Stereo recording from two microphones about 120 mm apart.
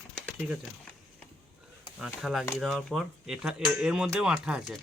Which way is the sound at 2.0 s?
Centre (ahead or behind).